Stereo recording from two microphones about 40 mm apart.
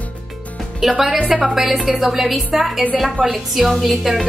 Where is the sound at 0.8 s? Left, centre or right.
Centre.